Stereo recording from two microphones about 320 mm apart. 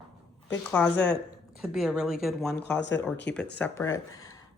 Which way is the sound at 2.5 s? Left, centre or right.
Left.